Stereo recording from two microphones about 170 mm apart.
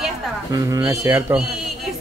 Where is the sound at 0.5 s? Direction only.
20° right (ahead or behind).